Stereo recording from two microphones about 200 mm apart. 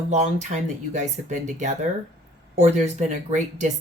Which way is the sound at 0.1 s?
35° right (ahead or behind).